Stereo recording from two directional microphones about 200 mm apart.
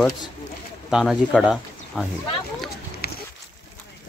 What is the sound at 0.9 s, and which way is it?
Speech, centre (ahead or behind).